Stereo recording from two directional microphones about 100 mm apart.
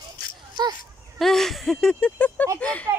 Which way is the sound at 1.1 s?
5° left (ahead or behind).